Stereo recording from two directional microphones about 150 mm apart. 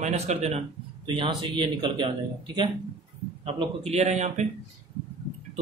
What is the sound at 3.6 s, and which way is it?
Speech, 45° right (ahead or behind).